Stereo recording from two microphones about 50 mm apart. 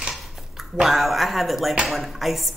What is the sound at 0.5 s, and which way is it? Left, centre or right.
Speech, centre.